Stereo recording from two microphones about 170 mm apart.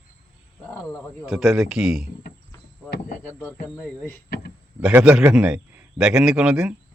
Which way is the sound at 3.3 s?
10° left (ahead or behind).